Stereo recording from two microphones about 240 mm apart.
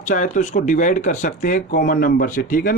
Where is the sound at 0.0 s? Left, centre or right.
Left.